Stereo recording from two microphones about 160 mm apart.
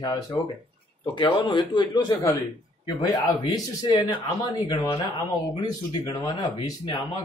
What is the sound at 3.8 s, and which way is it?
Speech, 25° left (ahead or behind).